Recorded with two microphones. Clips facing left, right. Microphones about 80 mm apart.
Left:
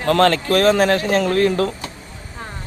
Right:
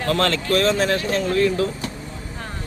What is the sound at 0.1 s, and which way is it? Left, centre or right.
Speech, left.